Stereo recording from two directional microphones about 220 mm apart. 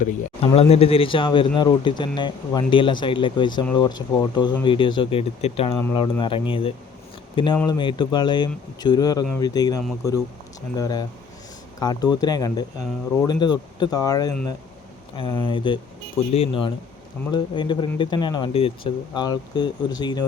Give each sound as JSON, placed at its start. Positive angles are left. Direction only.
{"t": 0.5, "sound": "speech", "side_deg": 25}
{"t": 5.7, "sound": "speech", "side_deg": 10}
{"t": 6.0, "sound": "speech", "side_deg": 25}
{"t": 7.5, "sound": "speech", "side_deg": 10}
{"t": 7.8, "sound": "speech", "side_deg": 20}